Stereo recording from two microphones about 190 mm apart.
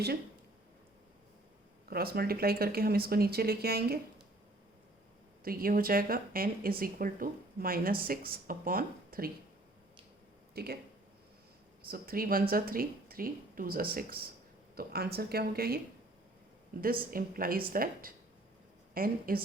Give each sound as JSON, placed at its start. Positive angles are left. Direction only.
{"t": 1.9, "sound": "speech", "side_deg": -55}
{"t": 5.5, "sound": "speech", "side_deg": -50}
{"t": 10.5, "sound": "speech", "side_deg": -55}
{"t": 11.9, "sound": "speech", "side_deg": -50}
{"t": 17.1, "sound": "speech", "side_deg": -50}